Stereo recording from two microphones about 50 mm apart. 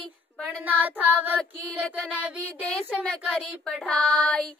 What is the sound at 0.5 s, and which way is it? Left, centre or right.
Child singing, right.